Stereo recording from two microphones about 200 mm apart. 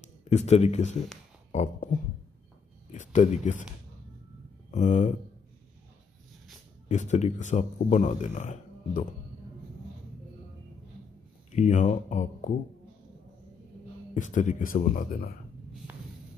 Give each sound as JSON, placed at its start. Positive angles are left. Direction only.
{"t": 0.3, "sound": "speech", "side_deg": 35}
{"t": 1.5, "sound": "a sound", "side_deg": 40}
{"t": 2.9, "sound": "speech", "side_deg": 35}
{"t": 4.6, "sound": "speech", "side_deg": 40}
{"t": 6.9, "sound": "speech", "side_deg": 35}
{"t": 11.5, "sound": "speech", "side_deg": 40}
{"t": 14.1, "sound": "speech", "side_deg": 40}